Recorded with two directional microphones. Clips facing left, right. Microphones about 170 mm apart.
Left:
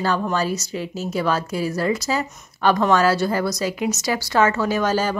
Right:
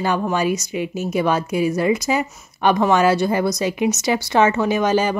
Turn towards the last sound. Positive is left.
turn(degrees=-15)  # may be behind; listen again after turning